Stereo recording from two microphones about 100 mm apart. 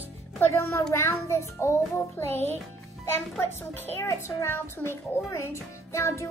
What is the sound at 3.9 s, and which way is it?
A child's voice, 25° left (ahead or behind).